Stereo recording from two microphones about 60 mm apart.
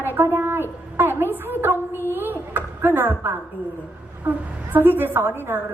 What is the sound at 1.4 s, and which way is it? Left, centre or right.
A woman's voice, right.